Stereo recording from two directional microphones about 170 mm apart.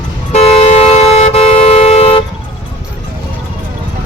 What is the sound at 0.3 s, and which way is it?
Vehicle, 35° left (ahead or behind).